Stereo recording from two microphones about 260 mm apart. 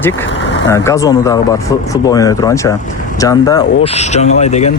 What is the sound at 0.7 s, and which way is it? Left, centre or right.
Speech, centre.